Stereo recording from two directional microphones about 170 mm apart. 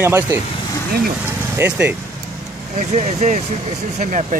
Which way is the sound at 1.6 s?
10° right (ahead or behind).